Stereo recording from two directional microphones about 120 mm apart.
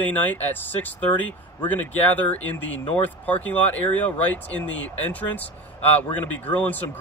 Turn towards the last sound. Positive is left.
turn(degrees=15)  # may be behind; listen again after turning